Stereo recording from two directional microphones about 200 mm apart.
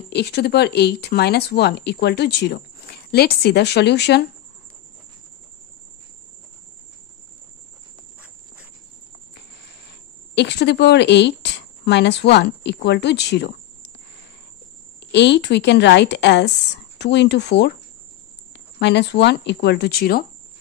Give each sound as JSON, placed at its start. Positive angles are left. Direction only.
{"t": 0.1, "sound": "speech", "side_deg": 55}
{"t": 10.3, "sound": "speech", "side_deg": 60}
{"t": 15.0, "sound": "speech", "side_deg": 60}
{"t": 18.8, "sound": "speech", "side_deg": 60}